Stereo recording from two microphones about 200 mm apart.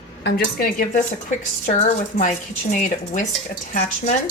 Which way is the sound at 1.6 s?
35° left (ahead or behind).